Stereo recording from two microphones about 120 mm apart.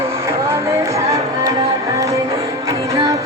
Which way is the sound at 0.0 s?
20° right (ahead or behind).